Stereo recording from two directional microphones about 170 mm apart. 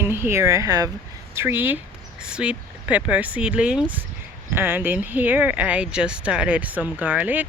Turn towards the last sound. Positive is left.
turn(degrees=-10)  # may be behind; listen again after turning